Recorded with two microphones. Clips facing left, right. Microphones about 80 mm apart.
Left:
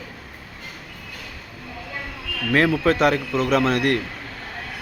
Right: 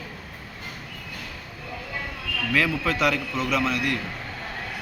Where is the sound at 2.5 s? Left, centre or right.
Left.